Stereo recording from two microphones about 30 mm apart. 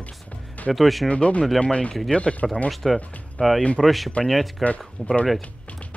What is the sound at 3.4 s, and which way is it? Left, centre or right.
Speech, left.